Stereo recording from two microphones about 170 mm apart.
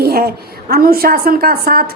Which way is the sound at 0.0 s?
65° right (ahead or behind).